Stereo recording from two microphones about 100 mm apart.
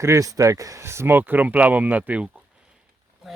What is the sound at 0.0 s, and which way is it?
Speech, 30° right (ahead or behind).